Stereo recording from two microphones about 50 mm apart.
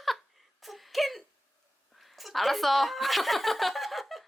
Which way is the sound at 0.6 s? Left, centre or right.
Centre.